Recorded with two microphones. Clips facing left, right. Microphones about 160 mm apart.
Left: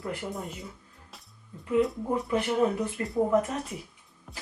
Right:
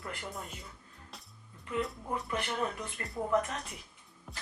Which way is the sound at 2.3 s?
15° left (ahead or behind).